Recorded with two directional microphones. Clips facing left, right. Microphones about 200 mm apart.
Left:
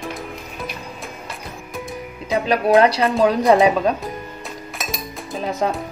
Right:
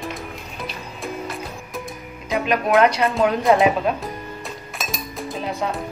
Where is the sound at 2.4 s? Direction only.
35° left (ahead or behind).